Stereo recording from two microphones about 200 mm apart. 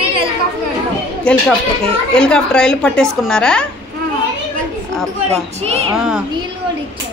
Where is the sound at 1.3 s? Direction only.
5° left (ahead or behind).